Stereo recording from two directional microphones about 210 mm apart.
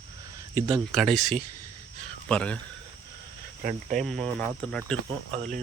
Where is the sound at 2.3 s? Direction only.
5° left (ahead or behind).